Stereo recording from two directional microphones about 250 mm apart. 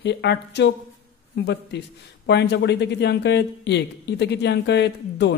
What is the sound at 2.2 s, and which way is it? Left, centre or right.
Speech, left.